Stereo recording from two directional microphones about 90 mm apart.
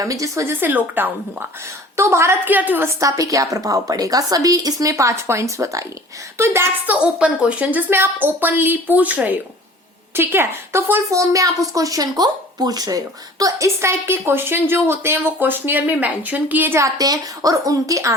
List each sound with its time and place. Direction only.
0.0 s a woman's voice: 35° right (ahead or behind)
0.6 s a woman's voice: 20° right (ahead or behind)
2.0 s a woman's voice: 30° right (ahead or behind)
2.5 s a woman's voice: 20° right (ahead or behind)
3.0 s a woman's voice: 40° right (ahead or behind)
6.9 s a woman's voice: 10° right (ahead or behind); by 13.0 s 45° right (ahead or behind)
13.4 s a woman's voice: 35° right (ahead or behind)
16.8 s a woman's voice: 40° right (ahead or behind)